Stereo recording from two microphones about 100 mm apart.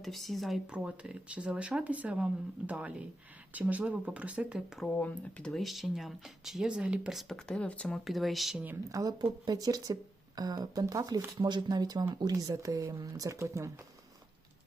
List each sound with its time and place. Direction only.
0.0 s speech: centre (ahead or behind)
4.9 s speech: 10° left (ahead or behind)
8.9 s speech: 35° right (ahead or behind)
11.3 s speech: 50° right (ahead or behind); by 13.7 s 30° right (ahead or behind)